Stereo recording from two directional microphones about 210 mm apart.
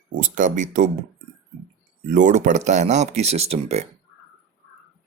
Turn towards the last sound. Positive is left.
turn(degrees=-30)  # may be behind; listen again after turning